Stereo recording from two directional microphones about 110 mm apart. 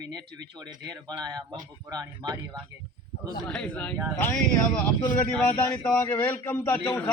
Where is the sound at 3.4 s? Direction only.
10° left (ahead or behind).